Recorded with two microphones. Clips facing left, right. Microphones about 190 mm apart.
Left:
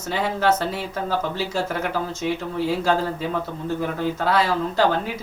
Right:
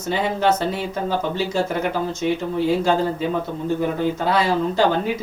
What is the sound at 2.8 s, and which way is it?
Speech, 25° right (ahead or behind).